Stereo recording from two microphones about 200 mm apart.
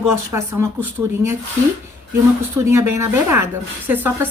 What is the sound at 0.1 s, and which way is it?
Speech, 15° right (ahead or behind).